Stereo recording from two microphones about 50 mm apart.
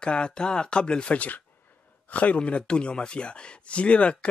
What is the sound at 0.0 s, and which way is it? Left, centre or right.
Speech, centre.